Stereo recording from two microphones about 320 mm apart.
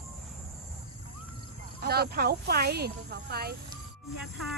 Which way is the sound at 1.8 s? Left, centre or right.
Right.